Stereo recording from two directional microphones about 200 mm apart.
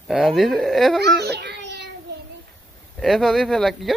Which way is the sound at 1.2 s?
55° right (ahead or behind).